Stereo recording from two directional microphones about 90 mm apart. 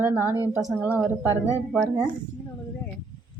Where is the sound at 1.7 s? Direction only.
Centre (ahead or behind).